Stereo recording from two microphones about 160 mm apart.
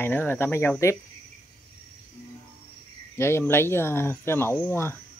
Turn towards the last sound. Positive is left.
turn(degrees=15)  # may be behind; listen again after turning